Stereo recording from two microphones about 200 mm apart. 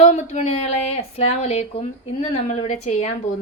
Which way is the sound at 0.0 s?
30° left (ahead or behind).